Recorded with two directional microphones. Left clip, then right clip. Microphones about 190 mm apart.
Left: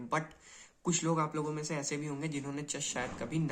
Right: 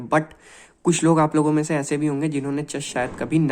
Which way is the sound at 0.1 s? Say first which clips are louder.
Right 14 dB; 35° right (ahead or behind).